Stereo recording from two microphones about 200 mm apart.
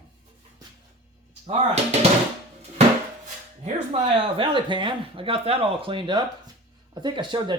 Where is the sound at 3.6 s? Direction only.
30° right (ahead or behind).